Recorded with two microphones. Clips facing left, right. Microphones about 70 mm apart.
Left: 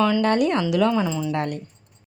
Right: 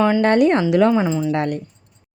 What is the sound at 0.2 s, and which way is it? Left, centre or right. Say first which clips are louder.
A woman's voice: right 5 dB; right.